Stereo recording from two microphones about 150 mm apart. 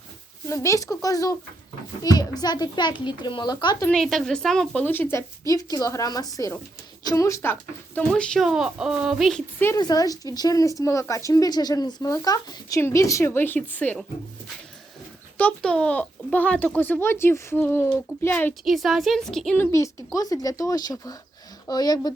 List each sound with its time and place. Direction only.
0.4 s speech: 20° left (ahead or behind)
3.8 s speech: centre (ahead or behind)
5.1 s speech: 25° left (ahead or behind); by 9.4 s centre (ahead or behind)
9.7 s speech: 25° left (ahead or behind); by 14.0 s 10° left (ahead or behind)
15.4 s a child's voice: 10° left (ahead or behind)
18.6 s speech: centre (ahead or behind)
19.5 s speech: 20° left (ahead or behind)